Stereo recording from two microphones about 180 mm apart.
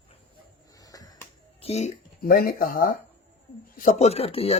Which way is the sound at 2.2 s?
55° left (ahead or behind).